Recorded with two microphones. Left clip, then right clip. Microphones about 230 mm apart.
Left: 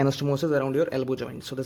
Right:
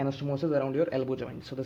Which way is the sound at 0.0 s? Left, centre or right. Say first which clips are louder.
Left 6 dB; left.